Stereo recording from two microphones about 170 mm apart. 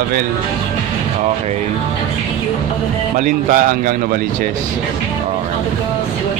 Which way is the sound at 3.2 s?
50° right (ahead or behind).